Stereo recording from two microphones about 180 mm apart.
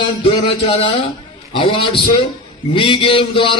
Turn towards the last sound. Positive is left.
turn(degrees=25)  # may be behind; listen again after turning